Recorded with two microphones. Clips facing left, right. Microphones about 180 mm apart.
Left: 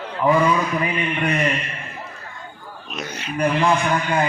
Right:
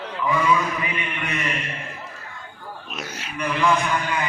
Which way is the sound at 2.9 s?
5° right (ahead or behind).